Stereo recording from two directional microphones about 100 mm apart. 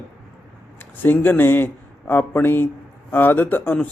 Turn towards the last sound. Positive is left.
turn(degrees=20)  # may be behind; listen again after turning